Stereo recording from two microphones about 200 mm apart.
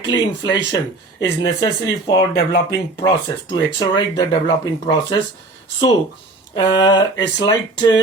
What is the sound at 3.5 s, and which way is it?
Speech, 20° left (ahead or behind).